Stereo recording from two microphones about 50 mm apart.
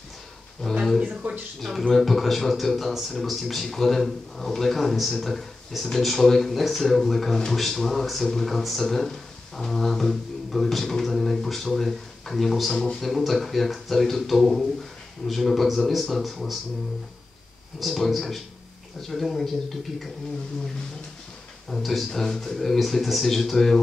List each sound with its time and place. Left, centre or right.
1.0 s speech: right
1.6 s speech: centre
17.7 s speech: centre
21.6 s speech: centre